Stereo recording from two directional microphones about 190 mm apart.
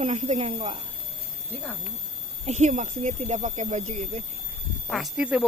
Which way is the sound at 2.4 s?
35° right (ahead or behind).